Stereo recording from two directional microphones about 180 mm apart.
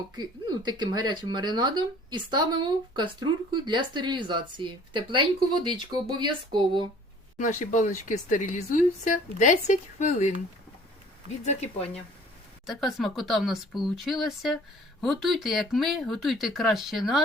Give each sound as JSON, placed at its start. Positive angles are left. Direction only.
{"t": 0.2, "sound": "speech", "side_deg": -25}
{"t": 7.3, "sound": "speech", "side_deg": 45}
{"t": 12.6, "sound": "speech", "side_deg": 0}